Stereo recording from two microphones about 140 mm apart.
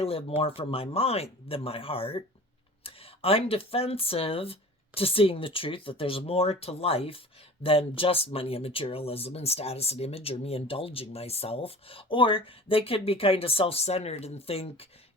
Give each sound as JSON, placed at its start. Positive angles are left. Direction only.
{"t": 0.0, "sound": "speech", "side_deg": 45}